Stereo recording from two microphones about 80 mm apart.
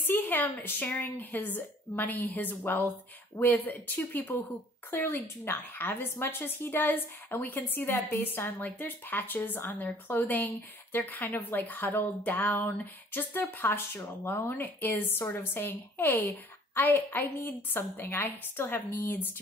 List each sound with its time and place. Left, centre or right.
0.0 s speech: left